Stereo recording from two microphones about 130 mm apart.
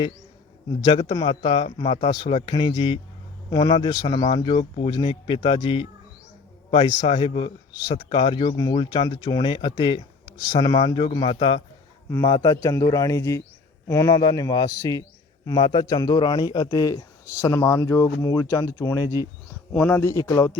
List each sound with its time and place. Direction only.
0.8 s a man's voice: 35° left (ahead or behind)
3.5 s a man's voice: 30° left (ahead or behind)
6.8 s a man's voice: 35° left (ahead or behind)
9.4 s a man's voice: 40° left (ahead or behind)
12.2 s a man's voice: 30° left (ahead or behind)
19.7 s speech: 10° left (ahead or behind)